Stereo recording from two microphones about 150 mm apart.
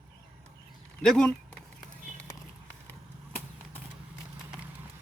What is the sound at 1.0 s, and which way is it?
Speech, 5° left (ahead or behind).